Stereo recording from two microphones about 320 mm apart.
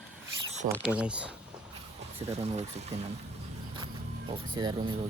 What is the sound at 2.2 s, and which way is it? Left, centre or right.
Speech, centre.